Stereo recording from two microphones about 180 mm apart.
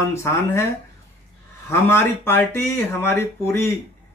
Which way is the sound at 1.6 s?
15° left (ahead or behind).